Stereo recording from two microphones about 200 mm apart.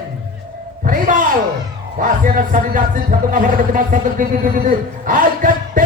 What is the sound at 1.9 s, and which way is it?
Speech, 45° right (ahead or behind).